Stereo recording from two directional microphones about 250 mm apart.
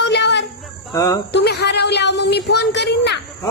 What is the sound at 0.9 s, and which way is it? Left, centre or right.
Speech, centre.